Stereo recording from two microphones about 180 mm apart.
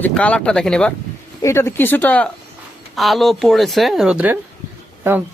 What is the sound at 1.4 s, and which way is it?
Speech, 15° left (ahead or behind).